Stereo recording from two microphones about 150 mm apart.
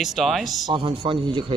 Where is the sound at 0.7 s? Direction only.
30° right (ahead or behind).